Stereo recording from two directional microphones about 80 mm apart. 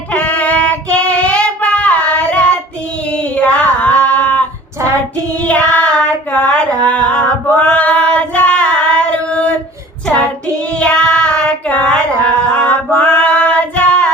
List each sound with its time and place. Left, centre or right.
0.1 s child singing: centre
3.1 s female singing: centre
5.4 s child singing: centre
6.3 s a sound: centre
7.7 s female singing: centre
10.8 s child singing: centre
11.7 s female singing: centre